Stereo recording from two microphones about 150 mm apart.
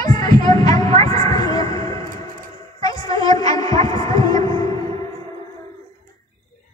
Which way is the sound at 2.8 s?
25° left (ahead or behind).